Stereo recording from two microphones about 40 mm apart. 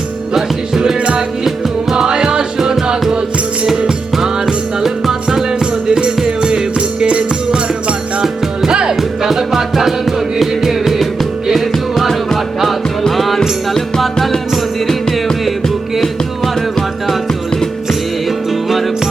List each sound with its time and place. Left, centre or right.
0.3 s music: centre
0.9 s music: right
1.5 s music: centre
2.6 s music: centre
3.1 s music: right
3.8 s music: centre
9.0 s music: centre
18.3 s music: centre